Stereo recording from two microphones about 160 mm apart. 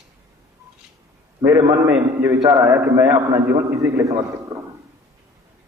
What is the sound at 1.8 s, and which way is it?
A man's voice, 10° right (ahead or behind).